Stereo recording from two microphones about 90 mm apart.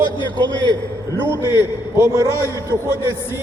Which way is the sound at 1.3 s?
30° right (ahead or behind).